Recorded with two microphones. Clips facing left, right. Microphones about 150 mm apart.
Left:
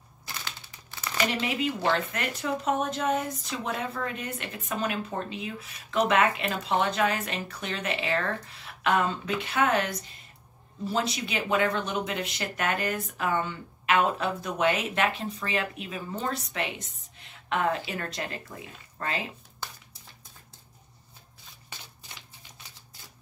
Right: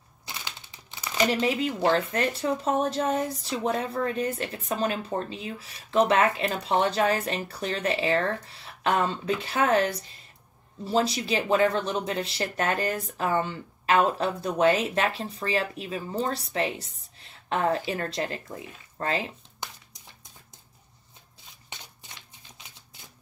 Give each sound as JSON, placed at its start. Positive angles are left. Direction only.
{"t": 0.2, "sound": "crumpling", "side_deg": -20}
{"t": 1.8, "sound": "speech", "side_deg": -35}
{"t": 19.6, "sound": "a sound", "side_deg": -20}